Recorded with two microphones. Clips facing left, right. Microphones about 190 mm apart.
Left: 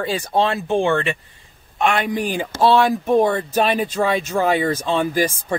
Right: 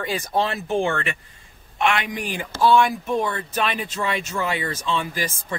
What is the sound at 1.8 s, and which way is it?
Speech, 35° left (ahead or behind).